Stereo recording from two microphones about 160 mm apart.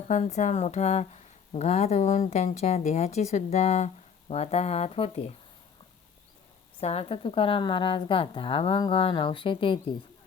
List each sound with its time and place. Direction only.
0.1 s speech: 45° left (ahead or behind)
6.7 s a woman's voice: 40° left (ahead or behind)